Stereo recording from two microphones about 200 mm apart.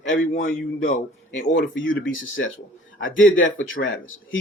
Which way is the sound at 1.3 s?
70° left (ahead or behind).